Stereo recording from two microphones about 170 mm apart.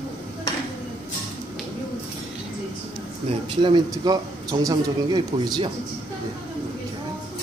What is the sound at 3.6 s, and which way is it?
Speech, 25° right (ahead or behind).